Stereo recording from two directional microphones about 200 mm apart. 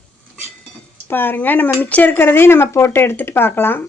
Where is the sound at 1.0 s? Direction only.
10° left (ahead or behind).